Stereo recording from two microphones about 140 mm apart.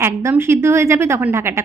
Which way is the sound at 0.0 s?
20° right (ahead or behind).